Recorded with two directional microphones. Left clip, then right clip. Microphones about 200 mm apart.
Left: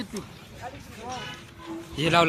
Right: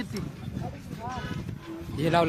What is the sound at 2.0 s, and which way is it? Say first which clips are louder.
Speech: left 3 dB; 10° right (ahead or behind).